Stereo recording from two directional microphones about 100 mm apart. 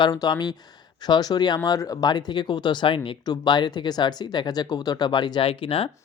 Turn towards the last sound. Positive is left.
turn(degrees=70)  # may be behind; listen again after turning